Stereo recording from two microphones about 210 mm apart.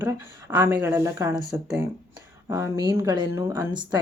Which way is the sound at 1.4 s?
Centre (ahead or behind).